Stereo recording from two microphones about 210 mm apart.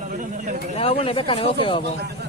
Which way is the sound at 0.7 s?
25° left (ahead or behind).